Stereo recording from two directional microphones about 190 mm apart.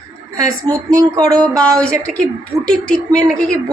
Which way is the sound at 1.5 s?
5° left (ahead or behind).